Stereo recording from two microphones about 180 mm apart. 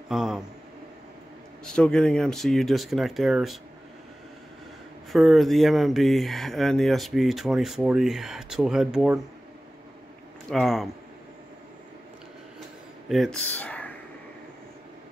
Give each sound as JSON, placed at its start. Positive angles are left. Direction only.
{"t": 0.1, "sound": "speech", "side_deg": 0}
{"t": 1.6, "sound": "speech", "side_deg": 5}
{"t": 5.1, "sound": "speech", "side_deg": 0}
{"t": 10.5, "sound": "speech", "side_deg": 0}
{"t": 13.1, "sound": "speech", "side_deg": 0}